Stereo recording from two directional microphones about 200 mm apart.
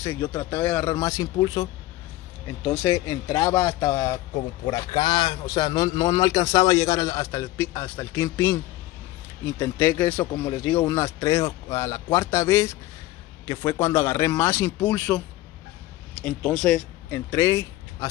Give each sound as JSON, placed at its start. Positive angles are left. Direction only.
{"t": 0.0, "sound": "a man's voice", "side_deg": 10}